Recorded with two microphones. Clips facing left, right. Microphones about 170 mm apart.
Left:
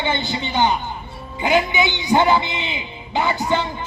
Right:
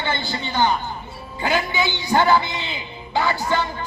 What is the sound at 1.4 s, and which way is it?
A man's voice, 20° left (ahead or behind).